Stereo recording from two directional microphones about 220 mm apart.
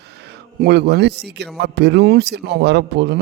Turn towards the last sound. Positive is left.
turn(degrees=-50)  # may be behind; listen again after turning